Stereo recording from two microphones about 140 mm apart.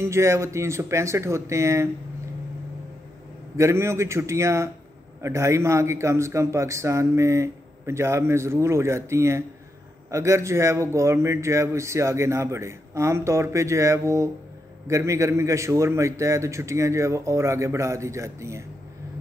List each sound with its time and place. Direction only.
0.0 s a man's voice: 20° right (ahead or behind)
3.5 s a man's voice: 20° right (ahead or behind)